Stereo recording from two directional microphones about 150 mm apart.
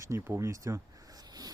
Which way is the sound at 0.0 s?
15° right (ahead or behind).